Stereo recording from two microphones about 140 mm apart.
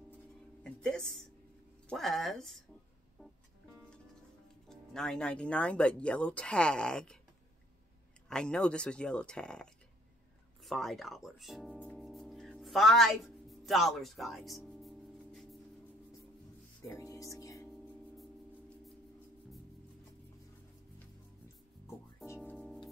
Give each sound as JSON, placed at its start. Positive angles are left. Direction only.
{"t": 1.9, "sound": "speech", "side_deg": 0}
{"t": 4.6, "sound": "speech", "side_deg": 5}
{"t": 8.3, "sound": "speech", "side_deg": 5}
{"t": 12.0, "sound": "music", "side_deg": 0}
{"t": 16.8, "sound": "speech", "side_deg": 25}
{"t": 21.8, "sound": "music", "side_deg": 20}
{"t": 22.6, "sound": "music", "side_deg": 0}